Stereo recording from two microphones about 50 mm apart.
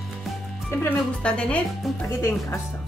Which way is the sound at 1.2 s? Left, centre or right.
Left.